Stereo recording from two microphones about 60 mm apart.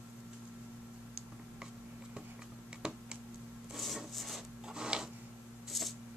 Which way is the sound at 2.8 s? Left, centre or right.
Centre.